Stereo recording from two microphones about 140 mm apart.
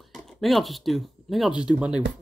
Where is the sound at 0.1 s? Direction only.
Centre (ahead or behind).